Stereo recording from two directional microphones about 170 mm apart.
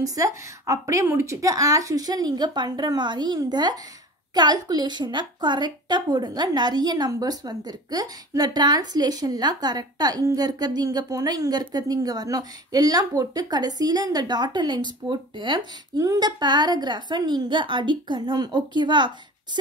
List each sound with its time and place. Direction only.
0.0 s a woman's voice: 20° right (ahead or behind)